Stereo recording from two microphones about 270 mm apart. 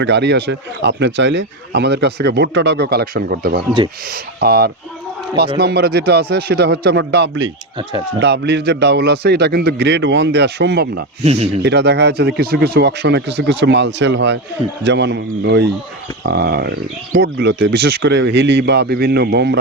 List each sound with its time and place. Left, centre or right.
0.0 s speech: right
11.2 s speech: right
11.6 s speech: right